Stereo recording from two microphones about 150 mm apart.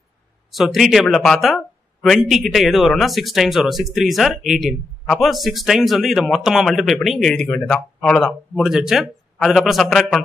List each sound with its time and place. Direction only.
0.5 s speech: centre (ahead or behind)